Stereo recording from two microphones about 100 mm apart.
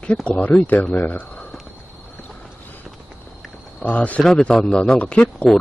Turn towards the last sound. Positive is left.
turn(degrees=10)  # may be behind; listen again after turning